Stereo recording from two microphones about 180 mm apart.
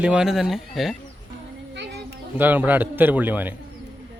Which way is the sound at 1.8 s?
65° right (ahead or behind).